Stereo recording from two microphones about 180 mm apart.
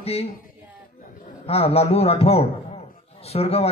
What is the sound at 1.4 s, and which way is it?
A man's voice, 35° left (ahead or behind).